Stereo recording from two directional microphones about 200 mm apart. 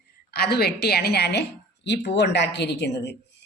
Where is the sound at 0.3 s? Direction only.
55° left (ahead or behind).